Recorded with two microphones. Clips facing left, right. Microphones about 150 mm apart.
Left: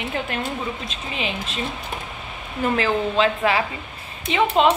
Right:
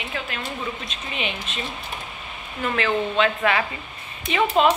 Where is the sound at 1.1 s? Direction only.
30° left (ahead or behind).